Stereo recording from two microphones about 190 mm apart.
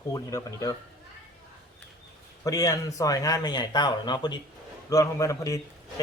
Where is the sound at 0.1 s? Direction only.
20° left (ahead or behind).